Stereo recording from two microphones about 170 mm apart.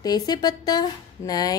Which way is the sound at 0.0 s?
25° left (ahead or behind).